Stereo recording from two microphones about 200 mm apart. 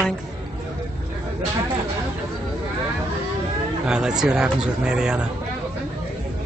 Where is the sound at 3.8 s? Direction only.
5° right (ahead or behind).